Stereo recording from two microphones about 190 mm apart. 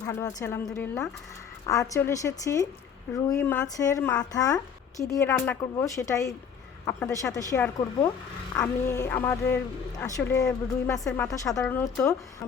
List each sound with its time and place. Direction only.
0.0 s speech: 15° left (ahead or behind)
11.5 s speech: 5° left (ahead or behind)